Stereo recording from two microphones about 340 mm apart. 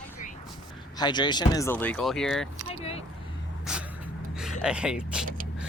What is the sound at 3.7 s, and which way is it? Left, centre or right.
Dog, centre.